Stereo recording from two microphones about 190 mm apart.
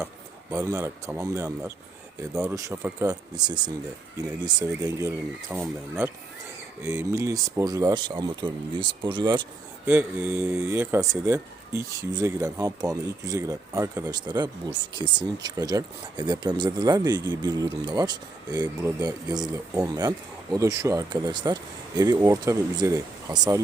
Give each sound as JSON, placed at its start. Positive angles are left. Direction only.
{"t": 0.5, "sound": "speech", "side_deg": -15}
{"t": 9.8, "sound": "speech", "side_deg": -10}